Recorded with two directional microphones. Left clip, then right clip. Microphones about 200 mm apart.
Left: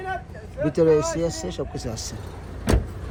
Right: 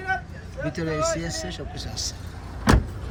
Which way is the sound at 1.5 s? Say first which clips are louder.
Left 5 dB; 35° left (ahead or behind).